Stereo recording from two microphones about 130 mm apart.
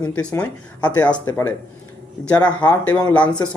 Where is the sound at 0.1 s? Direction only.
10° left (ahead or behind).